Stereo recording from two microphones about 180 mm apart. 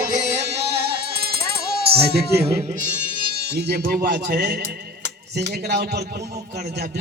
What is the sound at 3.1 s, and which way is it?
Speech, 65° right (ahead or behind).